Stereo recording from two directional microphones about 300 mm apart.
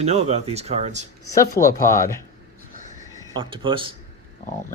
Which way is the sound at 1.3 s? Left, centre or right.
Centre.